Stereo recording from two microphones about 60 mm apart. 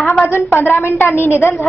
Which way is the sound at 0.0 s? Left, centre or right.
Left.